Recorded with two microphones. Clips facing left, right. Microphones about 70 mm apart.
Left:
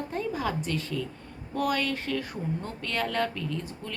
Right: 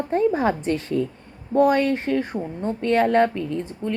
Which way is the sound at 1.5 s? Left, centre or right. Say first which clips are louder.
Right 10 dB; right.